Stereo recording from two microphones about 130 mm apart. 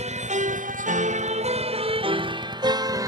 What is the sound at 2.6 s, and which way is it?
Music, 30° right (ahead or behind).